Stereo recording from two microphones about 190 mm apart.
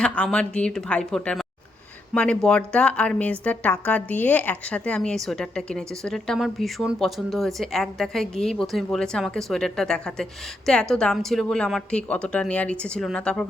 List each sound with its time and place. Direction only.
0.0 s a woman's voice: 5° left (ahead or behind)